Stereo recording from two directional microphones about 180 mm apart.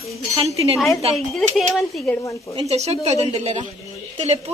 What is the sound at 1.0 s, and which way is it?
Speech, 35° right (ahead or behind).